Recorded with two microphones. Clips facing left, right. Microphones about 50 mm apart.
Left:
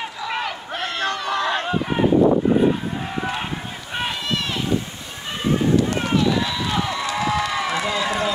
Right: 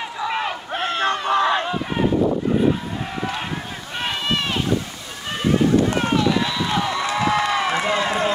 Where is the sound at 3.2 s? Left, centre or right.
Centre.